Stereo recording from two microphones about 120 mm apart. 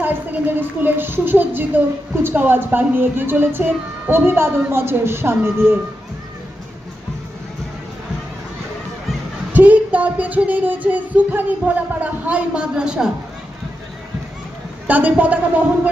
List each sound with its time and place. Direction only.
0.0 s a sound: 15° right (ahead or behind)
0.8 s speech: 15° right (ahead or behind)
9.5 s speech: 15° right (ahead or behind)
14.8 s speech: 15° right (ahead or behind)